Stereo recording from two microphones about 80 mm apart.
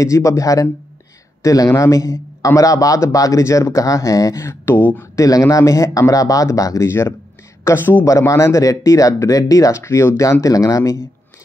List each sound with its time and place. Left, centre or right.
0.0 s a man's voice: left
5.1 s a man's voice: left
6.9 s speech: left
8.0 s speech: left